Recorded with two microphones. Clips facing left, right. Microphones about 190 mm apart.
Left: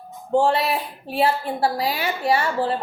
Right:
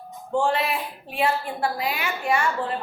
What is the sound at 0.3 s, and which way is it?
A woman's voice, 35° left (ahead or behind).